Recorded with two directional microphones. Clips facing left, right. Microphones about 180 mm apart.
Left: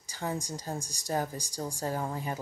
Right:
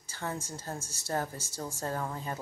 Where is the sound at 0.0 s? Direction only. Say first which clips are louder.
Left 3 dB; 15° left (ahead or behind).